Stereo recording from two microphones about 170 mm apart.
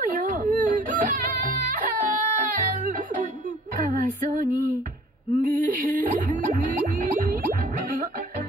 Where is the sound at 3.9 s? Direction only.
50° right (ahead or behind).